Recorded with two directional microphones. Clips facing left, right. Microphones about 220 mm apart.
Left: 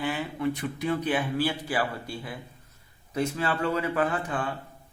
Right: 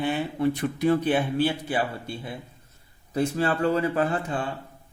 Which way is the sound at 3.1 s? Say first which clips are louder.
Right 4 dB; 35° right (ahead or behind).